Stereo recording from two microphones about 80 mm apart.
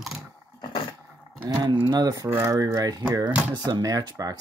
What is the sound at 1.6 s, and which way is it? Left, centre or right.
Speech, right.